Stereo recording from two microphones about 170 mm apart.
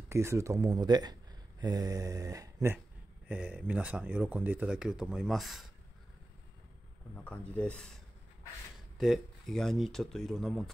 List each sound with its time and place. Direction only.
0.1 s a sound: 15° right (ahead or behind)
3.3 s speech: 10° right (ahead or behind)
7.2 s speech: 5° left (ahead or behind)